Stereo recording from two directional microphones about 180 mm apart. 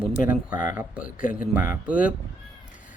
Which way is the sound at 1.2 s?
45° left (ahead or behind).